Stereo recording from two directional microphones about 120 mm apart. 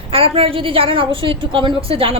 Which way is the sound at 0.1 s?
50° right (ahead or behind).